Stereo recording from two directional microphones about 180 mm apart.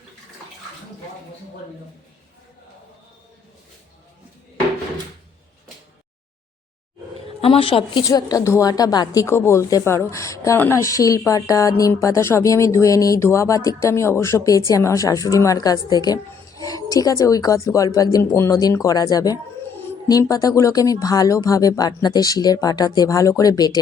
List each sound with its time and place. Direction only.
7.4 s speech: 30° left (ahead or behind)